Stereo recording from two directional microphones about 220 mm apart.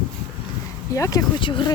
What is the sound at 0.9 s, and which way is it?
Speech, 15° left (ahead or behind).